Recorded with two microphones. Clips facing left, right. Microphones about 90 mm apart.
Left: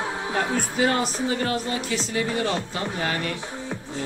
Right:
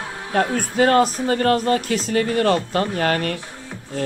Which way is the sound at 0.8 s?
50° right (ahead or behind).